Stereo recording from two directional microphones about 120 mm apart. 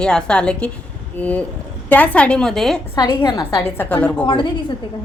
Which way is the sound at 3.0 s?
40° left (ahead or behind).